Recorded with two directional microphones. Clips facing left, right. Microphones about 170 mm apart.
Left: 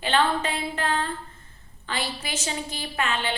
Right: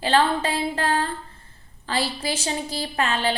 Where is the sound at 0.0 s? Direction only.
35° right (ahead or behind).